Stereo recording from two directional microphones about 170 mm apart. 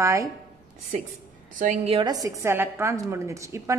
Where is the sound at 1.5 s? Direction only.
50° right (ahead or behind).